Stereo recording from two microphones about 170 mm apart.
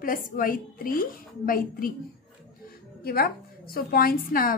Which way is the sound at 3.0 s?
65° left (ahead or behind).